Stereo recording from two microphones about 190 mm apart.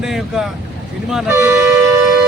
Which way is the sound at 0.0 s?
Centre (ahead or behind).